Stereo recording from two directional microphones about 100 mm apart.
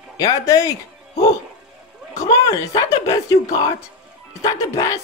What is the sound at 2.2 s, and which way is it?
Speech, 35° left (ahead or behind).